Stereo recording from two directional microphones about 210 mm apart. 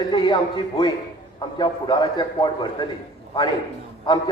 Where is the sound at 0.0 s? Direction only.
20° left (ahead or behind).